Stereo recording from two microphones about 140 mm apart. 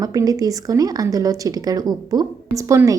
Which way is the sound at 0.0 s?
25° right (ahead or behind).